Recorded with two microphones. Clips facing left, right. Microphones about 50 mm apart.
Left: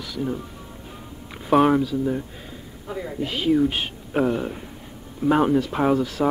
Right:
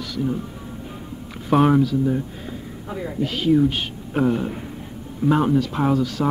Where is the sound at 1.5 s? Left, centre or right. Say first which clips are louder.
Right 1 dB; centre.